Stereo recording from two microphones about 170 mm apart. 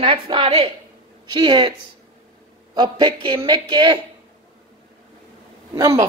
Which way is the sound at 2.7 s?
30° right (ahead or behind).